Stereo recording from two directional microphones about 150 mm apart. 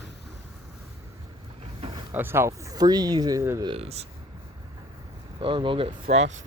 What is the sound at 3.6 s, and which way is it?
Speech, 40° right (ahead or behind).